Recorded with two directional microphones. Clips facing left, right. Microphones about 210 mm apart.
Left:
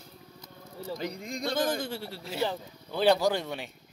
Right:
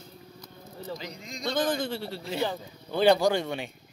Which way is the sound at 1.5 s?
10° left (ahead or behind).